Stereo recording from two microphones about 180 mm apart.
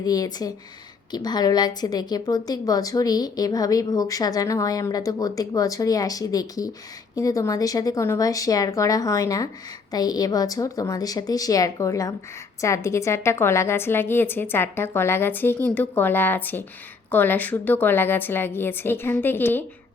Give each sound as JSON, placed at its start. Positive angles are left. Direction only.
{"t": 0.0, "sound": "a woman's voice", "side_deg": 20}